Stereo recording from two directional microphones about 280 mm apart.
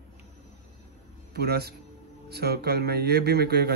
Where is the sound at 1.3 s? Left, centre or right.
Right.